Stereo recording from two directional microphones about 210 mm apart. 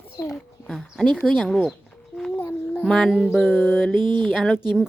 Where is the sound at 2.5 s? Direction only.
5° left (ahead or behind).